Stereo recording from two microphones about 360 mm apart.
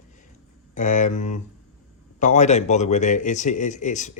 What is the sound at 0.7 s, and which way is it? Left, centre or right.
Speech, left.